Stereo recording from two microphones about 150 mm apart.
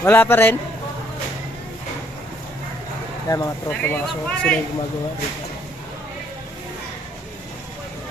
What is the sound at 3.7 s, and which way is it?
Speech, 10° left (ahead or behind).